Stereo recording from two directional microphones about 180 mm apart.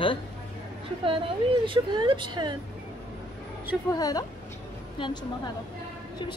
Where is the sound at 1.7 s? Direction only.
25° right (ahead or behind).